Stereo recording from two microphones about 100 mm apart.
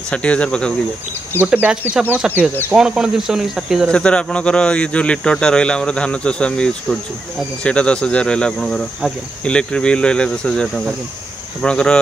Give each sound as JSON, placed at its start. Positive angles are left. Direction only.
{"t": 0.1, "sound": "speech", "side_deg": 10}
{"t": 1.4, "sound": "speech", "side_deg": -20}
{"t": 3.9, "sound": "speech", "side_deg": 10}